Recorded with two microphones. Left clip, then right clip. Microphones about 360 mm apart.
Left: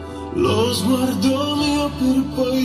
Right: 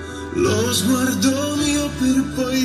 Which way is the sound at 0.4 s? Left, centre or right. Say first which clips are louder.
Left 1 dB; centre.